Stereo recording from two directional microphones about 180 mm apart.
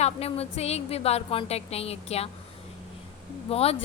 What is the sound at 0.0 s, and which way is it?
A woman's voice, 35° left (ahead or behind).